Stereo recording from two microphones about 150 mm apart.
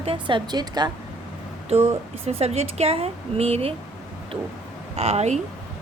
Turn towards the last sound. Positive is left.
turn(degrees=-50)  # may be behind; listen again after turning